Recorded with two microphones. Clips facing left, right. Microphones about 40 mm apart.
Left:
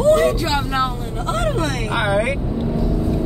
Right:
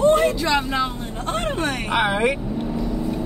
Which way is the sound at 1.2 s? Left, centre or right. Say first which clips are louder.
Left 3 dB; right.